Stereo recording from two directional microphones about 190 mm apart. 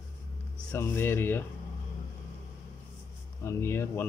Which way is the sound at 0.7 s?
10° left (ahead or behind).